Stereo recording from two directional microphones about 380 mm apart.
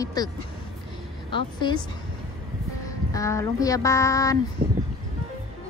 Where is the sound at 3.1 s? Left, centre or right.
Centre.